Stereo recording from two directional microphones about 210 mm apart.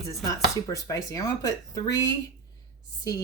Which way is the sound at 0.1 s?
15° left (ahead or behind).